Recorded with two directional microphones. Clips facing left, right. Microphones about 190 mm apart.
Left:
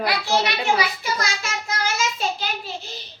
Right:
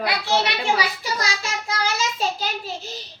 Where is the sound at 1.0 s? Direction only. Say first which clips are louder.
Even; 35° right (ahead or behind).